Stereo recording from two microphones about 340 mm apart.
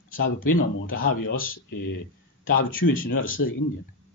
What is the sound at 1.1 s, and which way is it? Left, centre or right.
Speech, left.